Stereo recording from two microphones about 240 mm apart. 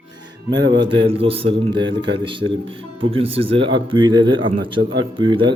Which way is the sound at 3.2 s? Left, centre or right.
Right.